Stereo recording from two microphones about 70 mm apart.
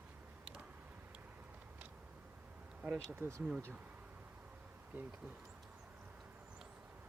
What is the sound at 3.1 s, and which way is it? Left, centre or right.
Speech, right.